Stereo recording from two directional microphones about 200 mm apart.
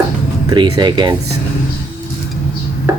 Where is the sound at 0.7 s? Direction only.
20° right (ahead or behind).